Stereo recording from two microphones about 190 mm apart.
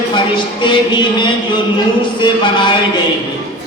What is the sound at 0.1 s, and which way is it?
Speech, 25° left (ahead or behind).